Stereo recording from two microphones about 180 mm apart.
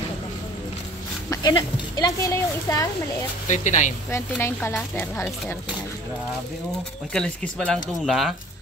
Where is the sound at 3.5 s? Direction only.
40° left (ahead or behind).